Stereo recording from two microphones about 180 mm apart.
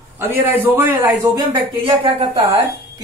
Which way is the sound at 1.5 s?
25° right (ahead or behind).